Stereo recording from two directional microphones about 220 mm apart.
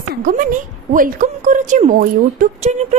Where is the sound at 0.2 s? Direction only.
40° right (ahead or behind).